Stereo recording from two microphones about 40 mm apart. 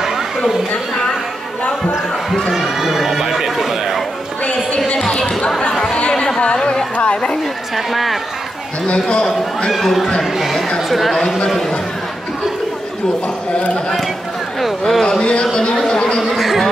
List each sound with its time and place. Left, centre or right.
2.5 s neigh: centre
6.1 s music: centre
6.4 s chatter: left
7.7 s speech: centre
9.1 s a man's voice: left
9.7 s speech: centre
11.1 s a man's voice: centre
14.6 s a sound: centre
15.1 s a man's voice: left
15.7 s a sound: centre
16.3 s a sound: centre